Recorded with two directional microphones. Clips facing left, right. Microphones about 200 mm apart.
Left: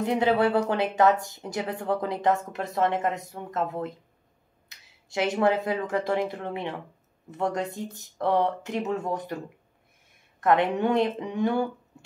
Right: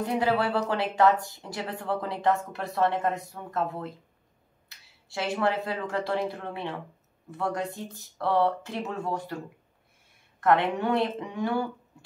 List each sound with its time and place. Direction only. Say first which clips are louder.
0.0 s speech: left 3 dB; 20° left (ahead or behind)
10.4 s speech: left 1 dB; 20° left (ahead or behind)